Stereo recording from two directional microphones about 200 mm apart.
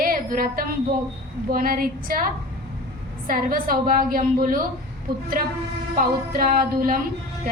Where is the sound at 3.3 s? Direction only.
45° right (ahead or behind).